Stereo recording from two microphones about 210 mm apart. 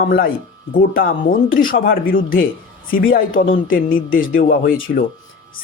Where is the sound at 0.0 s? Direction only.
40° left (ahead or behind).